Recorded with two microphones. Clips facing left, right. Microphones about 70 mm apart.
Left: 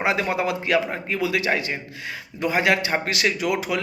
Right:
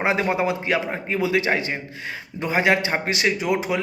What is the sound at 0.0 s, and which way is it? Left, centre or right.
A man's voice, right.